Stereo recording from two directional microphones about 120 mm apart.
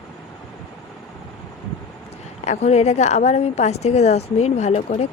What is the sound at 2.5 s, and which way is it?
A woman's voice, 65° left (ahead or behind).